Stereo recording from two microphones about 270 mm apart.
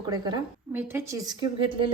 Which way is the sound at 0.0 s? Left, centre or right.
Centre.